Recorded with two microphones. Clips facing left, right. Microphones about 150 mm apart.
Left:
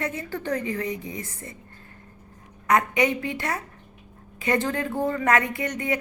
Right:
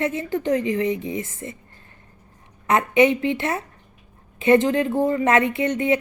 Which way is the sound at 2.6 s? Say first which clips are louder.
Right 4 dB; 25° right (ahead or behind).